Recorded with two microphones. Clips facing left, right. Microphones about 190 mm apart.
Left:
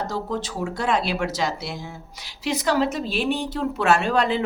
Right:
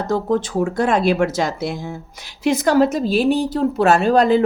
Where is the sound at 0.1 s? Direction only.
50° right (ahead or behind).